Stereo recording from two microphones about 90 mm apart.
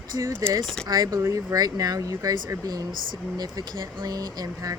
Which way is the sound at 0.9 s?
45° right (ahead or behind).